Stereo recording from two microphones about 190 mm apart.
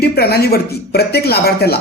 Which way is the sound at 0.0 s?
55° left (ahead or behind).